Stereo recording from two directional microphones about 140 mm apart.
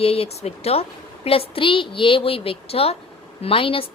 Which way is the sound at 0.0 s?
45° left (ahead or behind).